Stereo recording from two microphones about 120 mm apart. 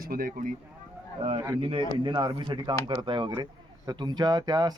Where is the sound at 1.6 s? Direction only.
50° right (ahead or behind).